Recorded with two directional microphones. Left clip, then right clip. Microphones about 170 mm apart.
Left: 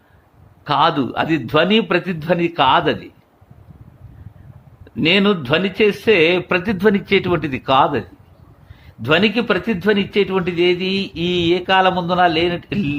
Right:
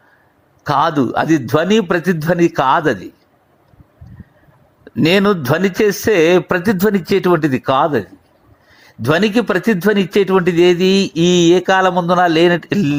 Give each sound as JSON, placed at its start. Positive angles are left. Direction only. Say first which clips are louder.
{"t": 0.6, "sound": "speech", "louder": "right 1 dB", "side_deg": -25}
{"t": 5.0, "sound": "speech", "louder": "right 2 dB", "side_deg": -35}